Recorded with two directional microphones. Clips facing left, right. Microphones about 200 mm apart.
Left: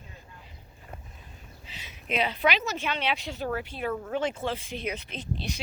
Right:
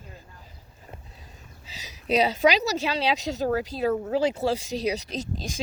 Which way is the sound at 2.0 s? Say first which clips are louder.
Right 6 dB; 40° right (ahead or behind).